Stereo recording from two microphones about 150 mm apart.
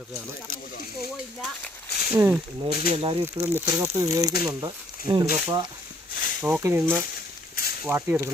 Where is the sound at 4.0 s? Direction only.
20° right (ahead or behind).